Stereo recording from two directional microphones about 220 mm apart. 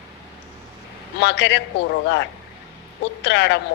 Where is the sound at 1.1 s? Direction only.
50° left (ahead or behind).